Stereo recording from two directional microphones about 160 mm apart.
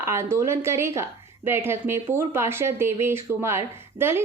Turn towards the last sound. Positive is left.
turn(degrees=-15)  # may be behind; listen again after turning